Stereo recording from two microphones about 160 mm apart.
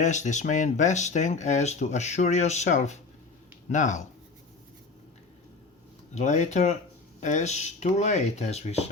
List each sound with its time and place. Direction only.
0.0 s speech: 50° left (ahead or behind)
6.1 s speech: 50° left (ahead or behind)